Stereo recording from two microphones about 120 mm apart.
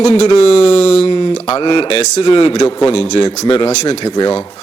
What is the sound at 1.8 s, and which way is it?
Speech, 60° left (ahead or behind).